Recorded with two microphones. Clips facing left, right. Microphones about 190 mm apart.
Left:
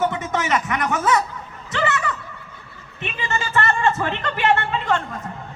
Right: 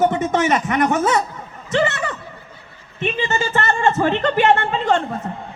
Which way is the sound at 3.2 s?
25° right (ahead or behind).